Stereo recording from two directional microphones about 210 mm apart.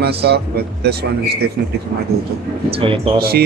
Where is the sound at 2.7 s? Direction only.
25° right (ahead or behind).